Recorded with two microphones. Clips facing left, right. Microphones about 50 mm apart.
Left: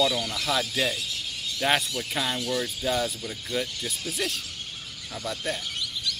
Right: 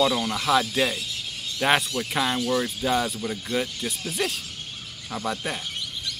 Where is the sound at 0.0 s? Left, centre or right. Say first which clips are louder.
Right 3 dB; right.